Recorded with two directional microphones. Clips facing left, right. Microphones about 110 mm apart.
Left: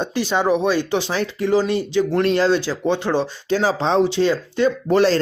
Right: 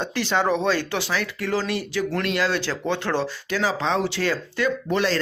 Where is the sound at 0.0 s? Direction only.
15° left (ahead or behind).